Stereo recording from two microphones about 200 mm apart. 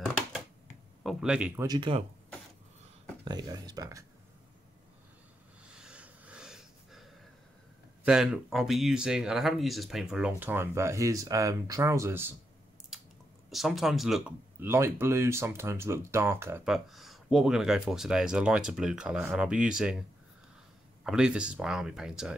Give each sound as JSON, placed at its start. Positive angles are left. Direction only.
{"t": 1.0, "sound": "speech", "side_deg": -5}
{"t": 1.6, "sound": "speech", "side_deg": -20}
{"t": 3.3, "sound": "speech", "side_deg": -20}
{"t": 5.6, "sound": "snort", "side_deg": -5}
{"t": 8.0, "sound": "speech", "side_deg": -5}
{"t": 12.9, "sound": "squish", "side_deg": 0}
{"t": 13.5, "sound": "speech", "side_deg": 0}
{"t": 21.0, "sound": "speech", "side_deg": -5}